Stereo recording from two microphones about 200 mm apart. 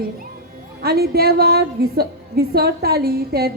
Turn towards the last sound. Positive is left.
turn(degrees=-50)  # may be behind; listen again after turning